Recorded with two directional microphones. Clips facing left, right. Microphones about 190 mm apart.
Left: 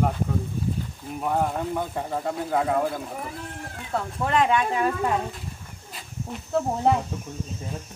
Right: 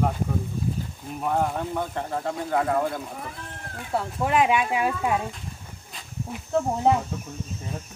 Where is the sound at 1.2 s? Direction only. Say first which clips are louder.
Even; centre (ahead or behind).